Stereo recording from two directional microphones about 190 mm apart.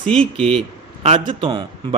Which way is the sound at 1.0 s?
30° right (ahead or behind).